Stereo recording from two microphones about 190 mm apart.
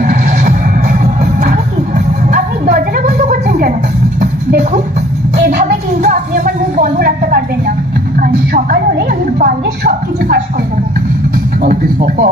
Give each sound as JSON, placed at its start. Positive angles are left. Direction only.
{"t": 0.0, "sound": "music", "side_deg": -45}
{"t": 2.3, "sound": "a sound", "side_deg": -45}
{"t": 8.2, "sound": "music", "side_deg": -50}
{"t": 11.6, "sound": "music", "side_deg": -50}